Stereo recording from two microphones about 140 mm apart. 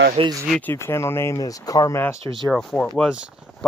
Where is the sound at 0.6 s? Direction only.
15° left (ahead or behind).